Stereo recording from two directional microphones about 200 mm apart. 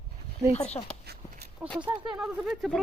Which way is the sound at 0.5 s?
30° left (ahead or behind).